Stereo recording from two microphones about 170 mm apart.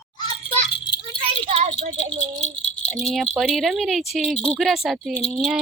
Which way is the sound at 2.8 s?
Centre (ahead or behind).